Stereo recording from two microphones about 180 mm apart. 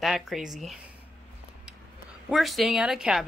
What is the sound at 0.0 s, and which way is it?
Speech, centre (ahead or behind).